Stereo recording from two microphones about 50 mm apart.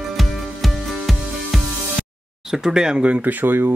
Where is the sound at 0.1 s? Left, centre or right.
Centre.